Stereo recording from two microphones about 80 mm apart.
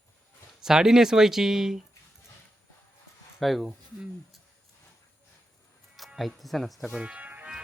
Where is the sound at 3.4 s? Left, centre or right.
Centre.